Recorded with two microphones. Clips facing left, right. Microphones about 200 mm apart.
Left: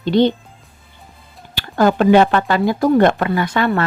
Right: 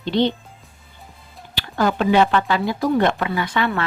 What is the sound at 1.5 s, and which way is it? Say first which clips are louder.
Speech: left 5 dB; 45° left (ahead or behind).